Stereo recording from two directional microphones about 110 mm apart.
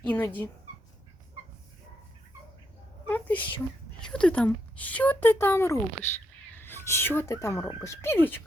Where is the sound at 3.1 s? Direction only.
15° left (ahead or behind).